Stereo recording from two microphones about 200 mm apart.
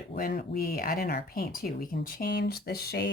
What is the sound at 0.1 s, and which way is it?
Speech, 50° left (ahead or behind).